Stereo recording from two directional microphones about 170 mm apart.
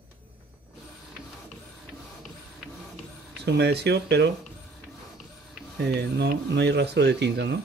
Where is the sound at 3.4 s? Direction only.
80° right.